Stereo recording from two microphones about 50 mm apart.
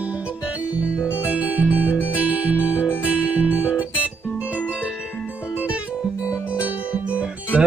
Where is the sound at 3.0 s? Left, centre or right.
Right.